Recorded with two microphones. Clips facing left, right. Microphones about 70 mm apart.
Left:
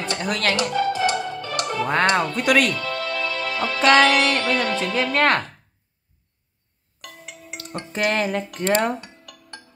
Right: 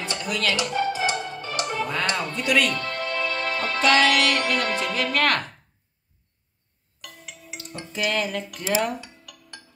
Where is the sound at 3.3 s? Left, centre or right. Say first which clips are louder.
Even; right.